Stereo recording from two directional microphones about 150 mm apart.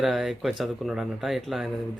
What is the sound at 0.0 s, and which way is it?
Speech, centre (ahead or behind).